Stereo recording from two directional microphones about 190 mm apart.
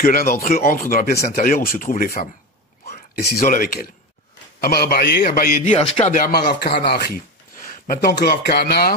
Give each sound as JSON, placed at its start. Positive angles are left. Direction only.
{"t": 0.0, "sound": "a man's voice", "side_deg": 50}
{"t": 7.5, "sound": "speech", "side_deg": 45}